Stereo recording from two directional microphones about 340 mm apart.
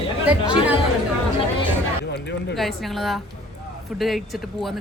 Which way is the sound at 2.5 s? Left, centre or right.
Centre.